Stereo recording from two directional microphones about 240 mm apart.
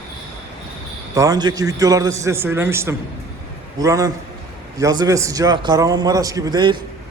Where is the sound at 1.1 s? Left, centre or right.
Centre.